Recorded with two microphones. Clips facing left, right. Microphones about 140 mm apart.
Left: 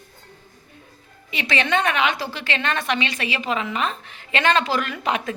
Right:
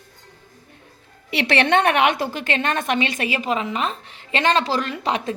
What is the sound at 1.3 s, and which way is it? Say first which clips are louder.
A woman's voice: right 4 dB; 70° right (ahead or behind).